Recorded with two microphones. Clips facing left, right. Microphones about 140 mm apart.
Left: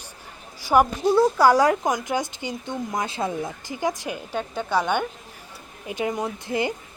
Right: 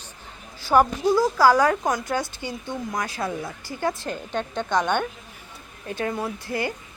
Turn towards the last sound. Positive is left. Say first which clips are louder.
# left 2 dB
turn(degrees=20)  # may be behind; listen again after turning